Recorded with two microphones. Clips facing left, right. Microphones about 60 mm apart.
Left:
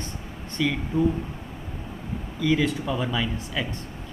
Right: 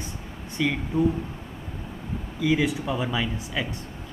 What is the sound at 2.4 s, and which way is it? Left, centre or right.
Speech, centre.